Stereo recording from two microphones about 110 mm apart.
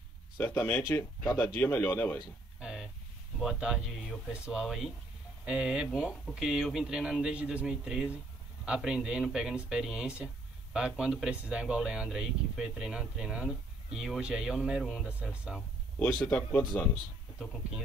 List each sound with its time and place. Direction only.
0.4 s speech: 15° left (ahead or behind)
2.6 s a sound: 5° right (ahead or behind)
3.3 s speech: 5° right (ahead or behind)
16.3 s speech: 15° left (ahead or behind)